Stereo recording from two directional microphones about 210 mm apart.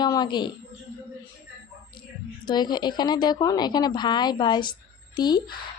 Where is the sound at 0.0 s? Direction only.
20° left (ahead or behind).